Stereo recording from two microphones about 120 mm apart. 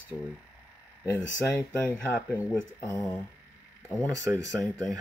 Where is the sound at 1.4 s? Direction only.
25° left (ahead or behind).